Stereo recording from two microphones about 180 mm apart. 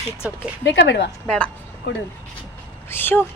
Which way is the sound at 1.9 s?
90° left.